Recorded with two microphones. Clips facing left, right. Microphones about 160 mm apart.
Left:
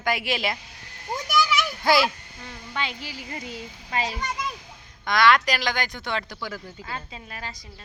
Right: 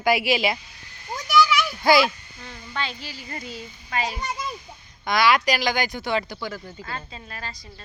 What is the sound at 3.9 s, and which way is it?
Speech, 30° left (ahead or behind).